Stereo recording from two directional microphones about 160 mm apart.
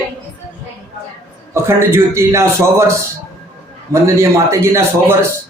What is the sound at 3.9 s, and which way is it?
A man's voice, 20° right (ahead or behind).